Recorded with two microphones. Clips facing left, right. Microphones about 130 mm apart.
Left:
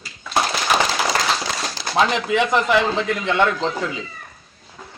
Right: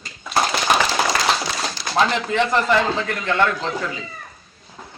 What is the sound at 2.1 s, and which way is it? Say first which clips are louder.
A man's voice: left 1 dB; 15° left (ahead or behind).